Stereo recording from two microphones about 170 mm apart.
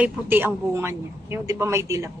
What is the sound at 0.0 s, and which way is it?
A man's voice, 10° right (ahead or behind).